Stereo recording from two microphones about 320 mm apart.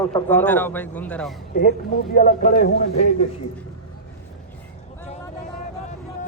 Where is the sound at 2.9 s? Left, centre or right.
Left.